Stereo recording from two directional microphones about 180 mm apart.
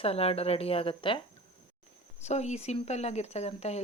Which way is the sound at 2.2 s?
40° left (ahead or behind).